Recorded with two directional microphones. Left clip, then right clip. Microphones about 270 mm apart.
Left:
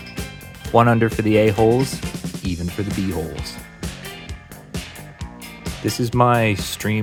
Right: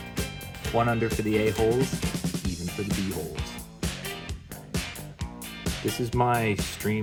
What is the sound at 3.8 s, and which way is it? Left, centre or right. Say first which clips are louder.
Music: right 3 dB; centre.